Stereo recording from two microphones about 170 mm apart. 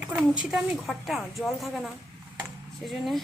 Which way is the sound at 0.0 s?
5° right (ahead or behind).